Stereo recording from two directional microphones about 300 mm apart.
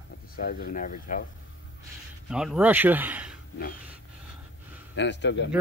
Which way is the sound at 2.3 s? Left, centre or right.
Centre.